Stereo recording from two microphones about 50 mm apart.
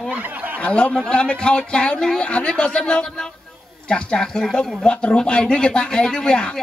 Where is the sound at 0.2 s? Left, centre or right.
Right.